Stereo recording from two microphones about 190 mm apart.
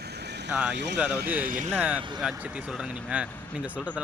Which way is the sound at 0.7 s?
65° right (ahead or behind).